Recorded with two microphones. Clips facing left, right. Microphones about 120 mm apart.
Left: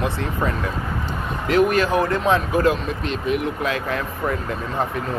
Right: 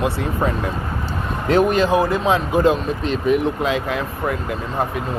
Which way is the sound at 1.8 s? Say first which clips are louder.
Right 2 dB; 15° right (ahead or behind).